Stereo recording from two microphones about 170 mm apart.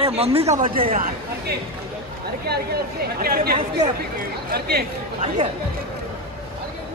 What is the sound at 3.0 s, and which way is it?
Speech, 65° right (ahead or behind).